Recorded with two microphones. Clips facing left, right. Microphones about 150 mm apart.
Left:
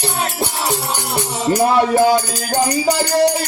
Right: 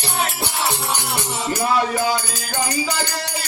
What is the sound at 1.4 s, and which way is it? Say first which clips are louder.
Music: left 6 dB; 40° left (ahead or behind).